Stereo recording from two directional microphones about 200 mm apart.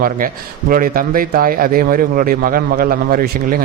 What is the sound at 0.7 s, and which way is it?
Speech, 45° right (ahead or behind).